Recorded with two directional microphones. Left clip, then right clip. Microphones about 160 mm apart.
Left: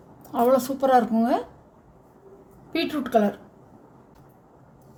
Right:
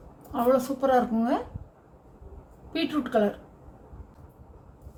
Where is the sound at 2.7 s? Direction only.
50° left (ahead or behind).